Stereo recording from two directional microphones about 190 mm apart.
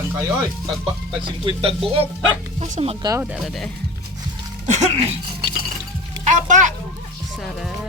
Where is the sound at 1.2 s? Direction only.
25° right (ahead or behind).